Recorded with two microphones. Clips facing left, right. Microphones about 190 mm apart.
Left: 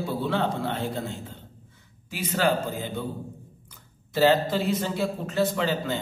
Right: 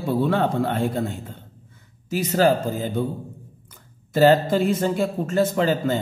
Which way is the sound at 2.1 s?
40° right (ahead or behind).